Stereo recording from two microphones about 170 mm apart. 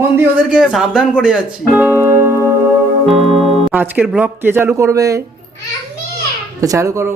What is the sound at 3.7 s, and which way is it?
Speech, 10° right (ahead or behind).